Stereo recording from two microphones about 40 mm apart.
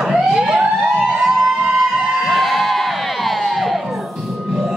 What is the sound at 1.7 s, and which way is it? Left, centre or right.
Crowd, centre.